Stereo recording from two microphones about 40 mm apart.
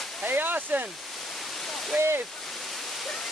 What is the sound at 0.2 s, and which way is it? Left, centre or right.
Waterfall, right.